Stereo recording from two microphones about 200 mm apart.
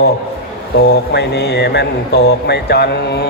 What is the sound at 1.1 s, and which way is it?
A man's voice, 55° left (ahead or behind).